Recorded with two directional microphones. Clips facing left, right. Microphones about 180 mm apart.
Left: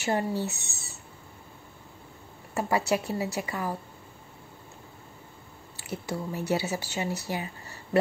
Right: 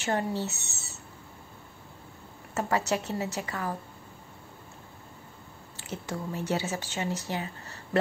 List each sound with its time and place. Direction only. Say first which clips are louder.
0.0 s speech: left 1 dB; 10° left (ahead or behind)
2.5 s speech: left 2 dB; 10° left (ahead or behind)
5.9 s speech: left 2 dB; 10° left (ahead or behind)